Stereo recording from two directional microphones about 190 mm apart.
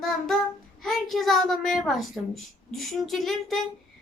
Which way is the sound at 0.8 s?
Centre (ahead or behind).